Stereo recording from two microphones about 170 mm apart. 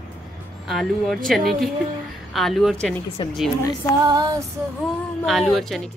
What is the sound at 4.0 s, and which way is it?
Female singing, 25° right (ahead or behind).